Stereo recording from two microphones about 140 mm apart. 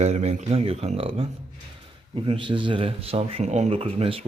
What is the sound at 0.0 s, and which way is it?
Speech, 50° right (ahead or behind).